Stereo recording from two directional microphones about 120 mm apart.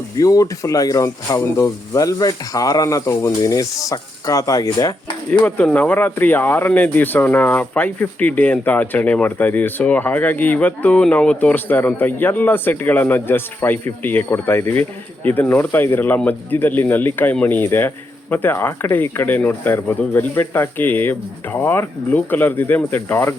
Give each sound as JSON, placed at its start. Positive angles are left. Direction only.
{"t": 0.2, "sound": "speech", "side_deg": 30}
{"t": 5.5, "sound": "speech", "side_deg": 15}